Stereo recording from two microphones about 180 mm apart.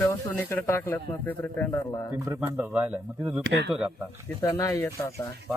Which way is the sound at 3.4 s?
70° right (ahead or behind).